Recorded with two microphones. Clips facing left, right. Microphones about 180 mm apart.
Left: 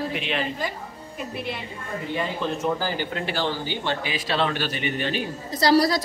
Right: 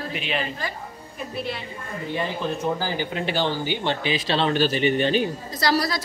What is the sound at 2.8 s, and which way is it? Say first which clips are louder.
Speech: right 1 dB; 20° right (ahead or behind).